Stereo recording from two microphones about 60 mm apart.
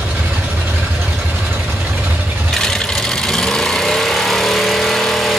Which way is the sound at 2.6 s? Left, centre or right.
Centre.